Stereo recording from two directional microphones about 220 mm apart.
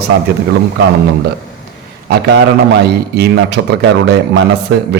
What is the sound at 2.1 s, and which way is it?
A man's voice, 50° right (ahead or behind).